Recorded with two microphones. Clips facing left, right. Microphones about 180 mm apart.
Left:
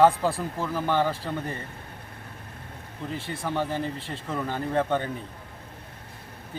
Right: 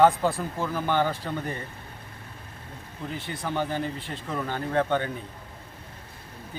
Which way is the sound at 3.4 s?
Centre (ahead or behind).